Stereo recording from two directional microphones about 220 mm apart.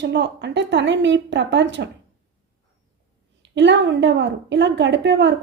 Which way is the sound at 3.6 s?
55° right (ahead or behind).